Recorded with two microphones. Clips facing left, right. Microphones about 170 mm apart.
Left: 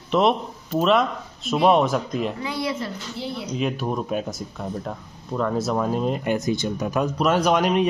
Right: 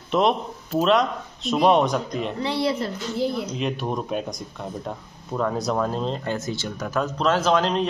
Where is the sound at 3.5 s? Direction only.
Centre (ahead or behind).